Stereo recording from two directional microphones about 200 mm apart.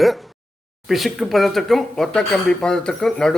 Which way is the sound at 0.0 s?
Centre (ahead or behind).